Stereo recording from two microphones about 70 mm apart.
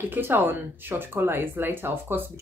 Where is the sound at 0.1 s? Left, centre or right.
Right.